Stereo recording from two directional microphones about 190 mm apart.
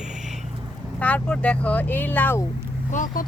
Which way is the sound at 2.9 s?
45° left (ahead or behind).